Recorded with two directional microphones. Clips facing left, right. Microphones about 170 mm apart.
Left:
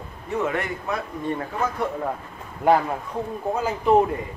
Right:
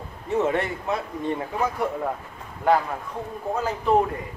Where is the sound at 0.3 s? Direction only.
25° right (ahead or behind).